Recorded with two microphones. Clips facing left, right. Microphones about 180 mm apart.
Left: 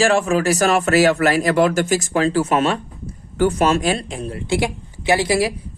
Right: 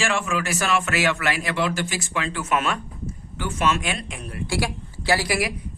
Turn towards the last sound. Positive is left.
turn(degrees=25)  # may be behind; listen again after turning